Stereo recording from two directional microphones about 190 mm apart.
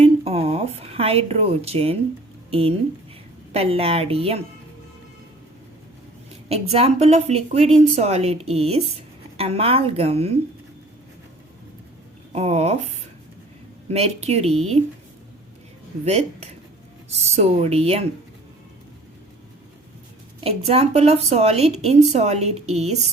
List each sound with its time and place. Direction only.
0.0 s a sound: 30° right (ahead or behind)
2.5 s a woman's voice: 30° right (ahead or behind)
6.5 s a woman's voice: 35° right (ahead or behind)
12.3 s a woman's voice: 35° right (ahead or behind)
13.9 s a woman's voice: 35° right (ahead or behind)
16.0 s a woman's voice: 35° right (ahead or behind)
20.4 s a woman's voice: 30° right (ahead or behind)